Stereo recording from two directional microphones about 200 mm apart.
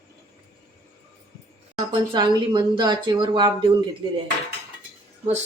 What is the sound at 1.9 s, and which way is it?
Speech, 25° right (ahead or behind).